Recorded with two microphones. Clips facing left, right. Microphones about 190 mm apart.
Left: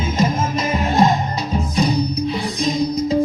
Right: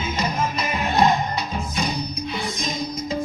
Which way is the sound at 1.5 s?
35° left (ahead or behind).